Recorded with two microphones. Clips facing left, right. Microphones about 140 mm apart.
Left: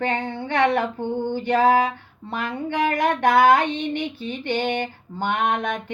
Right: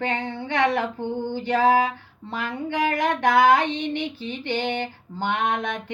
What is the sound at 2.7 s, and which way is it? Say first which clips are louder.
Female singing: left 2 dB; 50° left (ahead or behind).